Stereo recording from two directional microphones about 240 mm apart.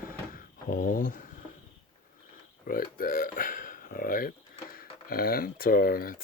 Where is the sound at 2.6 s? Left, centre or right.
Left.